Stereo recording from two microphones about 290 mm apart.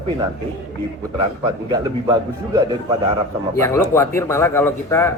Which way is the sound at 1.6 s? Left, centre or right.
Centre.